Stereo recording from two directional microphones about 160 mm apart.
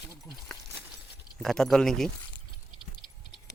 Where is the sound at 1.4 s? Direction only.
5° left (ahead or behind).